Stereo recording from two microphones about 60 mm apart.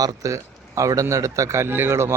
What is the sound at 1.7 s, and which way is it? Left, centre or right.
Speech, right.